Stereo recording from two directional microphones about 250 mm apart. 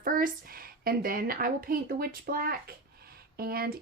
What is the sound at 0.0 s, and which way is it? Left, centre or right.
A woman's voice, right.